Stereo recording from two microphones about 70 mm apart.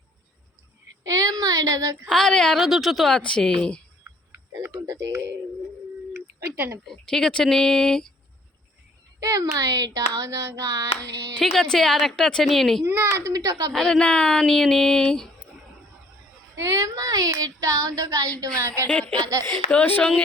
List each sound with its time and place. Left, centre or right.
1.0 s a sound: right
2.0 s speech: centre
2.6 s a woman's voice: centre
3.1 s speech: centre
4.6 s speech: right
6.1 s telephone: right
6.8 s speech: centre
9.2 s speech: right
11.3 s a woman's voice: centre
13.1 s speech: right
13.7 s speech: centre
16.6 s speech: right
18.9 s a woman's voice: centre